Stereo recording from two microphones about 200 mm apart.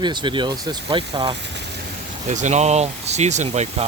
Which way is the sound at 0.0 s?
20° right (ahead or behind).